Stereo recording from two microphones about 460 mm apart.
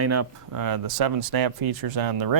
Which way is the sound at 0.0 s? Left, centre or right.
Right.